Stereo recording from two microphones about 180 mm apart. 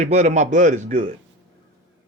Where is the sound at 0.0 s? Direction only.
35° right (ahead or behind).